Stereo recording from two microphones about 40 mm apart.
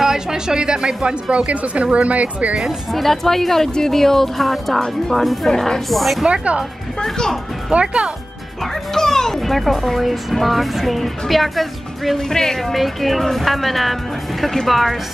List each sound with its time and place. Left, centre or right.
0.0 s speech: centre
1.3 s speech: right
2.9 s speech: centre
5.5 s speech: centre
5.9 s speech: centre
6.2 s speech: right
7.0 s speech: centre
7.7 s speech: right
8.9 s speech: centre
12.3 s speech: centre
12.7 s speech: centre